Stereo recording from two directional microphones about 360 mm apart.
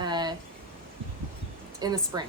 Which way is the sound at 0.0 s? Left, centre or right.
Centre.